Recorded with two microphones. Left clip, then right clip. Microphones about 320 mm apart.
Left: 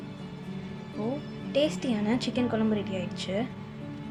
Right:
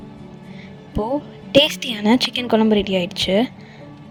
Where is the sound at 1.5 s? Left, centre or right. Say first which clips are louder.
Right 12 dB; right.